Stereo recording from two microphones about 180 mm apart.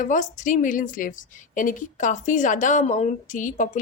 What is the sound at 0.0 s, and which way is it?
A woman's voice, 45° left (ahead or behind).